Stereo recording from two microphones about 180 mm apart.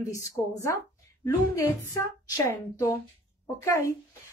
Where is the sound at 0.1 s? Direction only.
15° left (ahead or behind).